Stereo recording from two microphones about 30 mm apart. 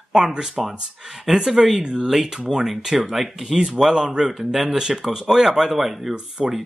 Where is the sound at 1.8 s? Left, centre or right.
Right.